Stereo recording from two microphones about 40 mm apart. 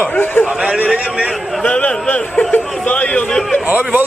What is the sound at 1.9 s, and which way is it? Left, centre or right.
Speech, left.